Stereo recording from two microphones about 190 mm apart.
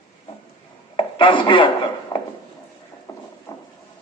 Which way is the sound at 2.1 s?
20° left (ahead or behind).